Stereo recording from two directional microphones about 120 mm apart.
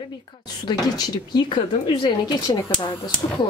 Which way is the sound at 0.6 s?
35° left (ahead or behind).